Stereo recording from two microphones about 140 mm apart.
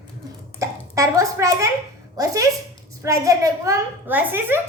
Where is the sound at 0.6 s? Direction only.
25° right (ahead or behind).